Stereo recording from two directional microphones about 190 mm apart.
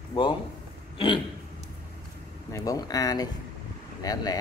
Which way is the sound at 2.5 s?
20° left (ahead or behind).